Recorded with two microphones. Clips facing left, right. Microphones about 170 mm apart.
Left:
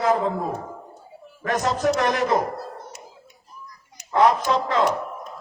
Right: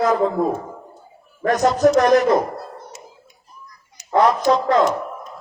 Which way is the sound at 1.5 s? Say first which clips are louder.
Right 6 dB; 40° right (ahead or behind).